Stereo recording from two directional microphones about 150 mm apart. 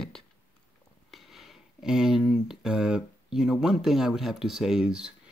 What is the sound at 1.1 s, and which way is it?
Speech, centre (ahead or behind).